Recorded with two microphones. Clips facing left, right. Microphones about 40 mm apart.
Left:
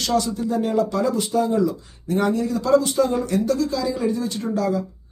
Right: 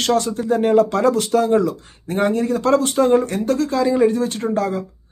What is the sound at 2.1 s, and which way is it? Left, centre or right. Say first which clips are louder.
Speech: right 3 dB; right.